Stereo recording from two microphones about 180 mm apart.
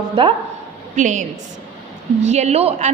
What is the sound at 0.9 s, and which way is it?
Speech, 45° right (ahead or behind).